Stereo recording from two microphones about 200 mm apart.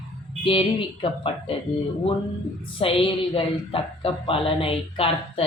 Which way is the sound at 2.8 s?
25° left (ahead or behind).